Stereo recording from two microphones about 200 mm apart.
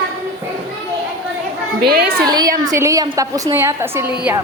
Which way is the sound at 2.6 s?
15° right (ahead or behind).